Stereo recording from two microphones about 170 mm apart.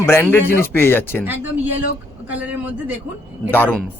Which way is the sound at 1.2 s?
10° right (ahead or behind).